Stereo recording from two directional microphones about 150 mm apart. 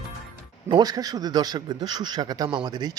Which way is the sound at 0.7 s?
25° right (ahead or behind).